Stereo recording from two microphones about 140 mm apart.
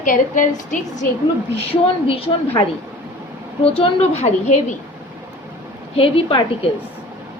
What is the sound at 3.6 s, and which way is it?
A woman's voice, 45° left (ahead or behind).